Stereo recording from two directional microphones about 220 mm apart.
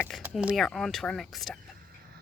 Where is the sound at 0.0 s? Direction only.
5° right (ahead or behind).